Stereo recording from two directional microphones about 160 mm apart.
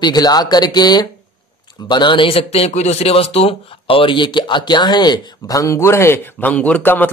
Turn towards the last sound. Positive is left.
turn(degrees=10)  # may be behind; listen again after turning